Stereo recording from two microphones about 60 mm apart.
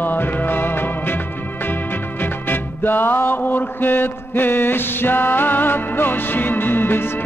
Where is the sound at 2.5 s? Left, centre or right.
Left.